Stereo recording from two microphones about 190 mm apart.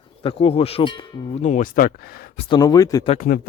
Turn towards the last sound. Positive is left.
turn(degrees=40)  # may be behind; listen again after turning